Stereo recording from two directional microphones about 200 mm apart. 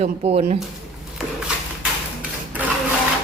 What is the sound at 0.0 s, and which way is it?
Speech, 30° right (ahead or behind).